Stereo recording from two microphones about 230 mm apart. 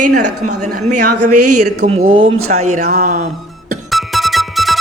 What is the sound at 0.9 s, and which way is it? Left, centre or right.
Speech, right.